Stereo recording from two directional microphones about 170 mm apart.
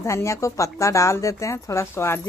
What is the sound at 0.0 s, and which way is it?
Speech, 15° left (ahead or behind).